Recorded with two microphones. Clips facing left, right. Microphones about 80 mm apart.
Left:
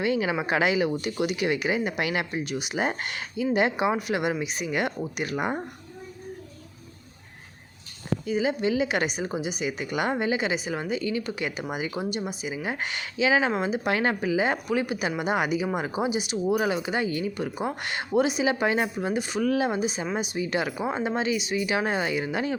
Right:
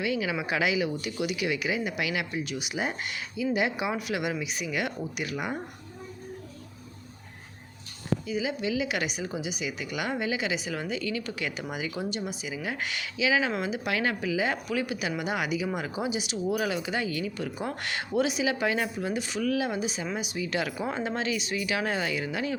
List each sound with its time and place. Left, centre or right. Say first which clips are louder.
0.0 s a woman's voice: left 4 dB; left
8.3 s a woman's voice: left 7 dB; left